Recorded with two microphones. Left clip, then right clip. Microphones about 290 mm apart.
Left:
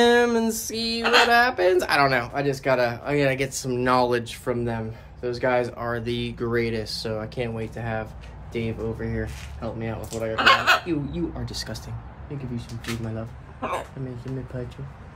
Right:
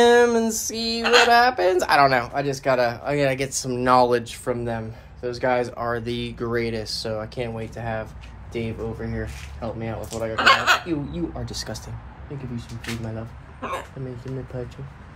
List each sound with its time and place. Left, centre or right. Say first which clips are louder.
0.0 s speech: right 3 dB; centre
11.1 s speech: even; centre
13.6 s speech: left 1 dB; centre
14.6 s speech: right 3 dB; centre